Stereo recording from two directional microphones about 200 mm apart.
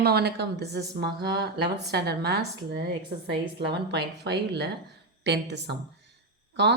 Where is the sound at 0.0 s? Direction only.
55° right (ahead or behind).